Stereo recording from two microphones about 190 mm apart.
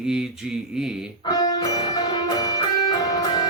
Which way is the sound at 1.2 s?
20° left (ahead or behind).